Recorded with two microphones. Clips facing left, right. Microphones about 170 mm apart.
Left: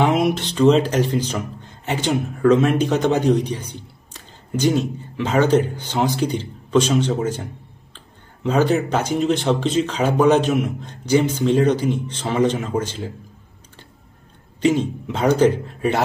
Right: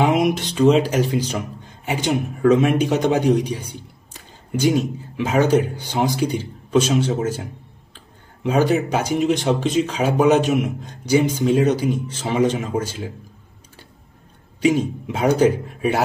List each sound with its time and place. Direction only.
0.0 s speech: 10° right (ahead or behind)
14.6 s speech: 10° right (ahead or behind)